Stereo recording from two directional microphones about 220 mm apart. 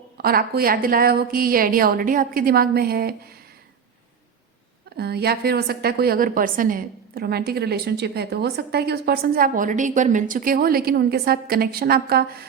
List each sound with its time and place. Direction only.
0.2 s a woman's voice: 45° right (ahead or behind)
4.9 s a woman's voice: 45° right (ahead or behind)